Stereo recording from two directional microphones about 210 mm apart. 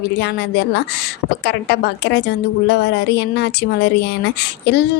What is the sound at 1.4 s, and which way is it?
A woman's voice, 50° left (ahead or behind).